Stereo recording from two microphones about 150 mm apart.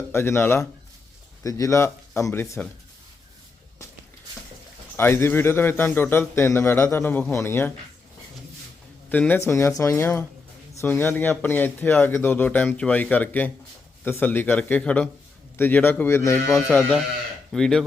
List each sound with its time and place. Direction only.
0.1 s speech: 15° left (ahead or behind)
4.9 s speech: 15° left (ahead or behind)
9.0 s speech: 10° left (ahead or behind)
17.5 s speech: 5° left (ahead or behind)